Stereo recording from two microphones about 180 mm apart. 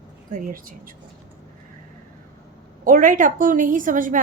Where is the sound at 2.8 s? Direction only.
50° right (ahead or behind).